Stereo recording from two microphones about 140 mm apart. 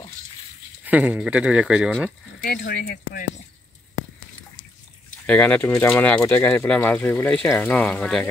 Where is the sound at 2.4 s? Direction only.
90° left.